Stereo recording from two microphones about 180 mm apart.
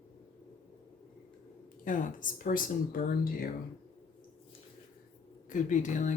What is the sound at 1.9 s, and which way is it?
Speech, 45° left (ahead or behind).